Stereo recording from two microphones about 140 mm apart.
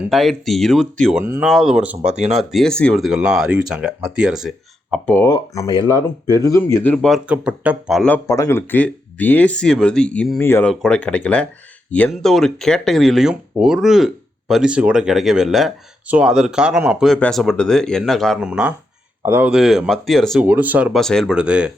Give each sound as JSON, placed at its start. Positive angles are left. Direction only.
{"t": 0.1, "sound": "speech", "side_deg": 0}
{"t": 1.2, "sound": "speech", "side_deg": -15}
{"t": 1.5, "sound": "speech", "side_deg": -5}
{"t": 5.2, "sound": "speech", "side_deg": 25}
{"t": 6.6, "sound": "speech", "side_deg": 15}
{"t": 7.1, "sound": "speech", "side_deg": -10}
{"t": 8.3, "sound": "speech", "side_deg": 20}
{"t": 10.4, "sound": "speech", "side_deg": 15}
{"t": 10.7, "sound": "speech", "side_deg": 5}
{"t": 19.2, "sound": "speech", "side_deg": -15}
{"t": 19.5, "sound": "speech", "side_deg": 0}
{"t": 20.5, "sound": "speech", "side_deg": -10}
{"t": 20.9, "sound": "speech", "side_deg": 5}
{"t": 21.3, "sound": "speech", "side_deg": -5}